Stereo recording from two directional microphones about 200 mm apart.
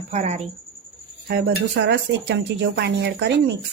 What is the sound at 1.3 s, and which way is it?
A woman's voice, 50° right (ahead or behind).